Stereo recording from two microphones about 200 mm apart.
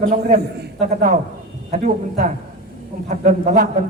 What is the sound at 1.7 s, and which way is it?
A man's voice, 35° right (ahead or behind).